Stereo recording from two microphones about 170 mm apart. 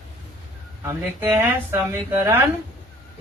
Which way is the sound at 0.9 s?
15° right (ahead or behind).